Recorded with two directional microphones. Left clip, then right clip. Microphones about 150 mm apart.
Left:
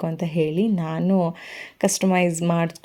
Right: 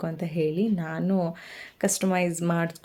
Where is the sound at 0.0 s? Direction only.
20° left (ahead or behind).